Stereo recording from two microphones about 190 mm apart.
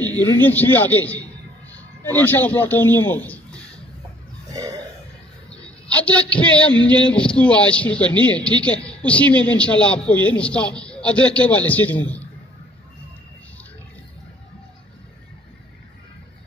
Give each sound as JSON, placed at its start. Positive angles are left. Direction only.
{"t": 0.0, "sound": "a man's voice", "side_deg": 10}
{"t": 4.6, "sound": "burping", "side_deg": -20}
{"t": 5.9, "sound": "a man's voice", "side_deg": 5}